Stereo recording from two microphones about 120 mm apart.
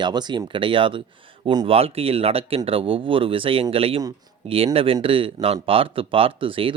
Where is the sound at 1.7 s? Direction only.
55° right (ahead or behind).